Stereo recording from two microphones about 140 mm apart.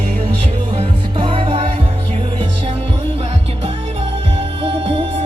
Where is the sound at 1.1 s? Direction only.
35° right (ahead or behind).